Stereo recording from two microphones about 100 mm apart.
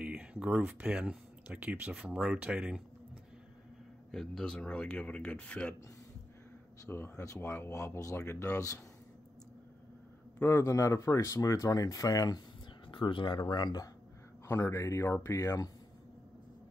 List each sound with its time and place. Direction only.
0.0 s speech: 10° right (ahead or behind)
4.1 s speech: 5° left (ahead or behind)
6.9 s speech: 25° left (ahead or behind)
10.4 s speech: 30° left (ahead or behind)
12.8 s speech: 55° left (ahead or behind)
14.5 s speech: 30° left (ahead or behind)